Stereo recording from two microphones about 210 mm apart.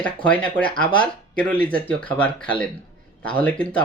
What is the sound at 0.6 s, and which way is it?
Speech, 40° right (ahead or behind).